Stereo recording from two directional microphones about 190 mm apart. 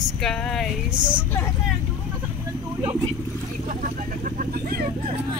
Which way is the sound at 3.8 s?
45° right (ahead or behind).